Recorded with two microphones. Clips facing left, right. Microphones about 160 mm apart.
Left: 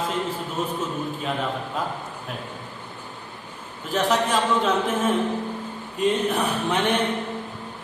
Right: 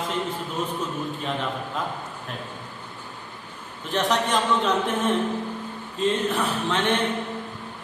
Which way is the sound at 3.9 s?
5° left (ahead or behind).